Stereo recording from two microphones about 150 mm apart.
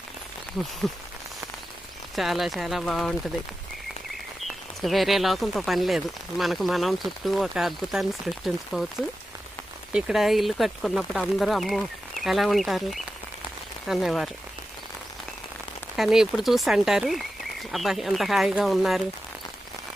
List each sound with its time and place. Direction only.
2.1 s speech: centre (ahead or behind)
4.4 s speech: centre (ahead or behind)
9.9 s speech: 5° right (ahead or behind)
16.0 s speech: centre (ahead or behind)